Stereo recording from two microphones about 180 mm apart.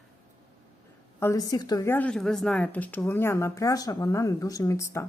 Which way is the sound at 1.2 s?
20° left (ahead or behind).